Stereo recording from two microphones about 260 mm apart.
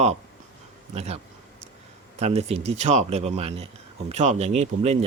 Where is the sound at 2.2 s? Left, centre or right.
Right.